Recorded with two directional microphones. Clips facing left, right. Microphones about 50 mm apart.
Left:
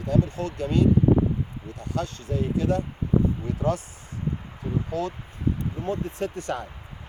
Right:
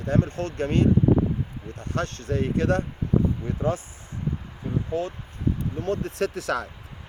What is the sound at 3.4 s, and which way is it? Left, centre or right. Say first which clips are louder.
Speech: even; right.